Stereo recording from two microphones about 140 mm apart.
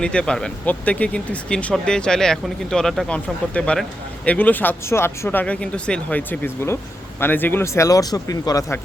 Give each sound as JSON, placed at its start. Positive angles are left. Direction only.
{"t": 0.0, "sound": "speech", "side_deg": 5}